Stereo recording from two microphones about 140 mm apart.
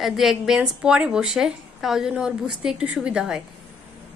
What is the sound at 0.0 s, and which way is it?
A woman's voice, centre (ahead or behind).